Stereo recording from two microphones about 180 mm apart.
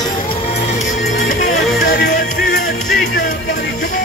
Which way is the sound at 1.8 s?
65° left (ahead or behind).